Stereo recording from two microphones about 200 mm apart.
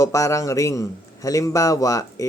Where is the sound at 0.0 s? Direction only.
15° left (ahead or behind).